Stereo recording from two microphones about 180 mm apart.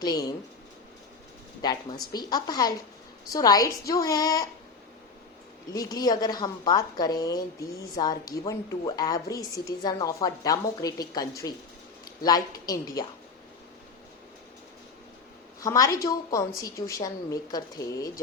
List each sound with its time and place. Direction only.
0.0 s a woman's voice: 20° left (ahead or behind)
1.6 s a woman's voice: 25° left (ahead or behind)
5.7 s a woman's voice: 20° left (ahead or behind)
15.6 s a woman's voice: 20° left (ahead or behind)